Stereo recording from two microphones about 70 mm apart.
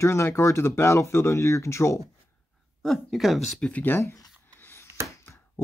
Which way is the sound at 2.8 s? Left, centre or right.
Centre.